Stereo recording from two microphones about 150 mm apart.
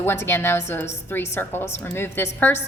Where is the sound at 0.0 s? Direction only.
15° left (ahead or behind).